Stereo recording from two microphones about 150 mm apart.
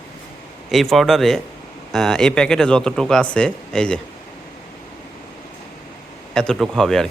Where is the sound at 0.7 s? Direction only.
Centre (ahead or behind).